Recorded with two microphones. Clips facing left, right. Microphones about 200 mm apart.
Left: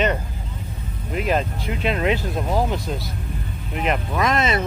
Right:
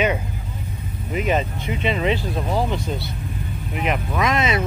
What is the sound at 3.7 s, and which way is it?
Speech, 5° right (ahead or behind).